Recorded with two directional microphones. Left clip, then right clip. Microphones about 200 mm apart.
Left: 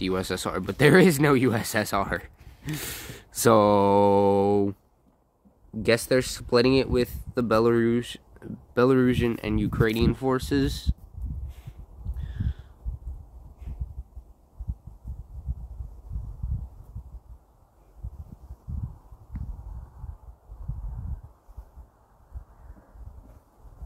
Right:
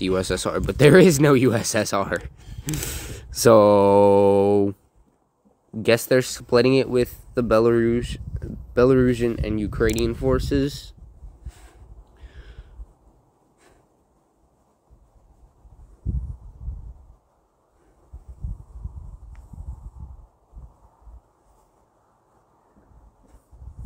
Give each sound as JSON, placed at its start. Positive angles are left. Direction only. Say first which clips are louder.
{"t": 0.0, "sound": "speech", "louder": "right 5 dB", "side_deg": -15}
{"t": 5.8, "sound": "speech", "louder": "right 4 dB", "side_deg": -20}
{"t": 12.0, "sound": "a sound", "louder": "left 12 dB", "side_deg": -5}